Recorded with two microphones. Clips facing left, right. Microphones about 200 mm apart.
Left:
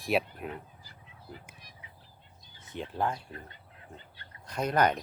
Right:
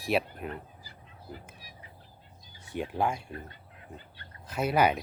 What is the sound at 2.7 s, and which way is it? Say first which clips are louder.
Speech: right 3 dB; 10° right (ahead or behind).